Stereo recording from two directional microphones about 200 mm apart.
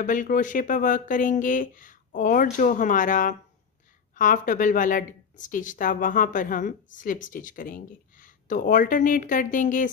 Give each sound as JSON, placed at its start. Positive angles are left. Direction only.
{"t": 0.0, "sound": "a woman's voice", "side_deg": 40}